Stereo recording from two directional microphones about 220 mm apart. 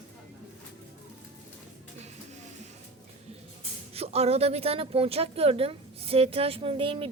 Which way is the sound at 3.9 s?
30° right (ahead or behind).